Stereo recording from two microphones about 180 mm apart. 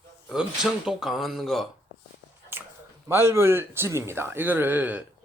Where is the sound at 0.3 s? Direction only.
5° right (ahead or behind).